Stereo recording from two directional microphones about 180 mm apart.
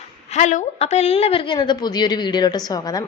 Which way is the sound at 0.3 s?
40° left (ahead or behind).